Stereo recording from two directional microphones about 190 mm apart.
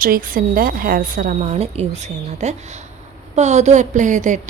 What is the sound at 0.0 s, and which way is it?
A woman's voice, 50° right (ahead or behind).